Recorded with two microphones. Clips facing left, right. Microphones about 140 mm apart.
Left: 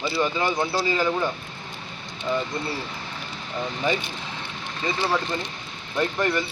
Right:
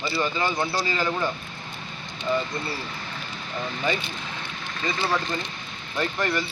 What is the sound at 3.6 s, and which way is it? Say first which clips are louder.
Speech: left 2 dB; 15° left (ahead or behind).